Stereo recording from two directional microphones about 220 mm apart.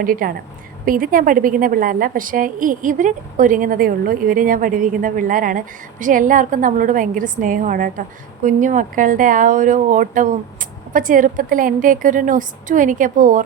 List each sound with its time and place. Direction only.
0.0 s a woman's voice: 40° right (ahead or behind)